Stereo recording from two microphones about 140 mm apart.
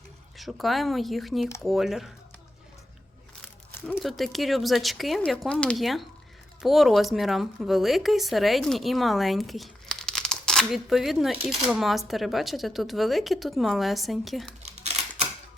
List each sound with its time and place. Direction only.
0.3 s speech: centre (ahead or behind)
3.9 s speech: centre (ahead or behind)
14.6 s a sound: 50° right (ahead or behind)